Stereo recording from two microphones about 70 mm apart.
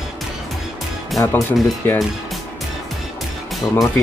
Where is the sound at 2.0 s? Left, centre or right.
Centre.